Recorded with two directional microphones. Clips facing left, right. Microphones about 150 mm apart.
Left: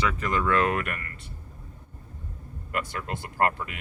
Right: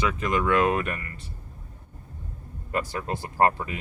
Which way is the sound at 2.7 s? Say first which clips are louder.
Right 3 dB; 30° right (ahead or behind).